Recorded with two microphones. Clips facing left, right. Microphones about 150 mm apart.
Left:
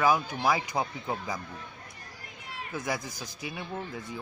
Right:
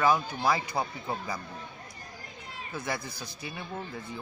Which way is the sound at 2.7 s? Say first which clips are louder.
Left 1 dB; 10° left (ahead or behind).